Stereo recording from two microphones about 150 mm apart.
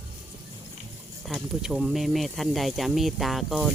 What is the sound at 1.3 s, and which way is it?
Speech, 5° right (ahead or behind).